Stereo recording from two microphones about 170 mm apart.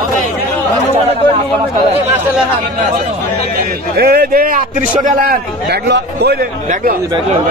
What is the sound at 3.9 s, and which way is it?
A man's voice, 65° right (ahead or behind).